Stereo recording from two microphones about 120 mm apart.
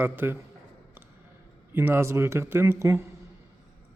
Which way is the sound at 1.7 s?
20° right (ahead or behind).